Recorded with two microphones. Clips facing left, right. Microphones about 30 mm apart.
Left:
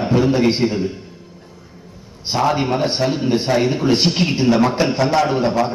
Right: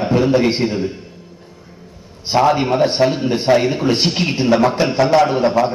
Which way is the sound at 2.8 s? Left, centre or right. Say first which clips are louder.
Right 4 dB; centre.